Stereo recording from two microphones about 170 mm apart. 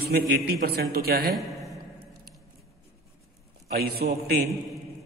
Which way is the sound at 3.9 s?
65° right (ahead or behind).